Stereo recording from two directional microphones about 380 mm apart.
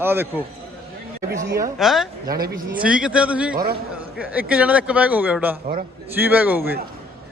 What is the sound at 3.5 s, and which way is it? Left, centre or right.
Speech, right.